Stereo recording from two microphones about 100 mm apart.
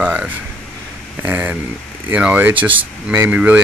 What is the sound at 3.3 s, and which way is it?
Speech, 15° right (ahead or behind).